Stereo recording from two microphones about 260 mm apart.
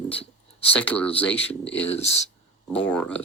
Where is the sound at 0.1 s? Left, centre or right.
Left.